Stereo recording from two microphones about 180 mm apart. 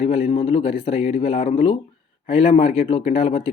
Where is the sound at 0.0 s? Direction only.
35° left (ahead or behind).